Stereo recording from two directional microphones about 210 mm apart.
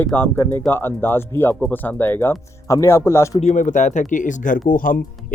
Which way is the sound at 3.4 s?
35° left (ahead or behind).